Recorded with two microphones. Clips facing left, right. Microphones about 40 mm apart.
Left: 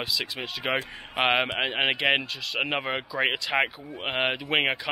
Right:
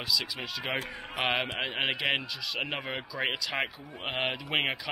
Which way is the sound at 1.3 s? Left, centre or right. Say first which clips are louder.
Left 5 dB; centre.